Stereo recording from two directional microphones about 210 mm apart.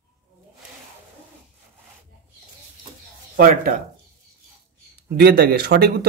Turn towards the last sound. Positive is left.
turn(degrees=-50)  # may be behind; listen again after turning